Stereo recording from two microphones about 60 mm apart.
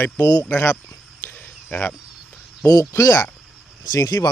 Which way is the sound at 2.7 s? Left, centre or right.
Left.